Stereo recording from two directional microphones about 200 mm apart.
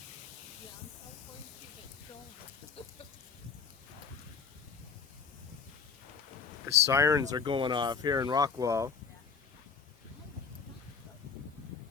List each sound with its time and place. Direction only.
2.8 s chicken: 30° left (ahead or behind)
6.8 s speech: 15° right (ahead or behind)